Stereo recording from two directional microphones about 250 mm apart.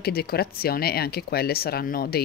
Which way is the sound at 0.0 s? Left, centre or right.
Left.